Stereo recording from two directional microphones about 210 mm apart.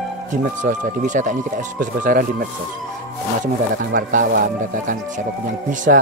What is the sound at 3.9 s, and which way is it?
Speech, 40° right (ahead or behind).